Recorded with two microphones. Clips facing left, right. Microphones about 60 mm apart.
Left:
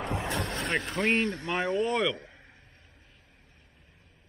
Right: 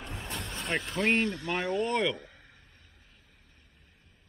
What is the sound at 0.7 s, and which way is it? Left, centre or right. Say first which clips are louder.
Speech: right 1 dB; centre.